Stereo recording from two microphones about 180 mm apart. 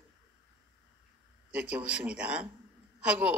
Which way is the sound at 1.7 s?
5° right (ahead or behind).